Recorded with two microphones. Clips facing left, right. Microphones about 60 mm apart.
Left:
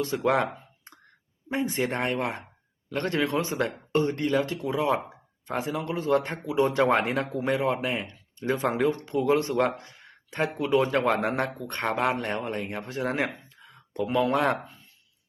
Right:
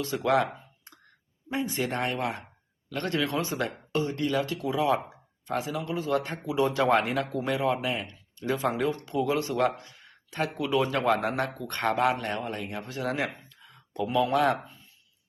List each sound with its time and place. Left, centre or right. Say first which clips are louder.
1.5 s speech: left 2 dB; left
14.3 s speech: even; left